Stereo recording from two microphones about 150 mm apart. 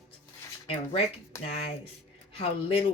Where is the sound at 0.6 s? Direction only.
40° left (ahead or behind).